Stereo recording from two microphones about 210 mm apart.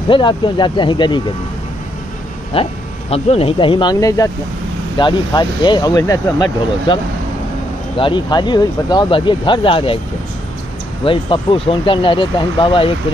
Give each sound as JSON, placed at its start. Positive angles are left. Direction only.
{"t": 0.1, "sound": "speech", "side_deg": 25}
{"t": 2.5, "sound": "speech", "side_deg": 25}
{"t": 8.0, "sound": "speech", "side_deg": 20}
{"t": 11.1, "sound": "speech", "side_deg": 25}